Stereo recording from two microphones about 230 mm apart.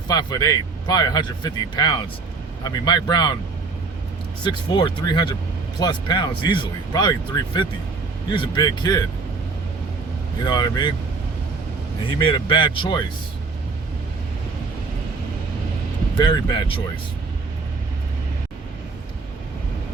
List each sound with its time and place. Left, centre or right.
0.1 s a man's voice: centre
4.4 s speech: centre
10.4 s a man's voice: centre
12.2 s speech: left
16.1 s speech: centre